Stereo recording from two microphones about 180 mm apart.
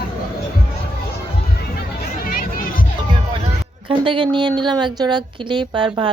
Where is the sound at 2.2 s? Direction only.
50° left (ahead or behind).